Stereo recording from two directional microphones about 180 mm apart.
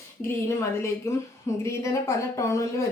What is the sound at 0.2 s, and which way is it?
Speech, 15° left (ahead or behind).